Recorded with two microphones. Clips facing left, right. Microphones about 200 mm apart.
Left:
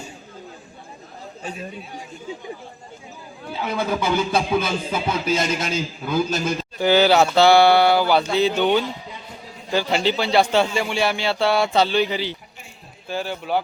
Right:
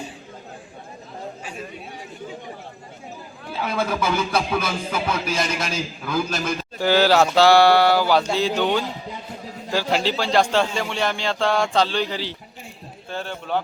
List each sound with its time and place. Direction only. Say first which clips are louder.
3.5 s music: even; 15° left (ahead or behind)
6.7 s a man's voice: left 1 dB; centre (ahead or behind)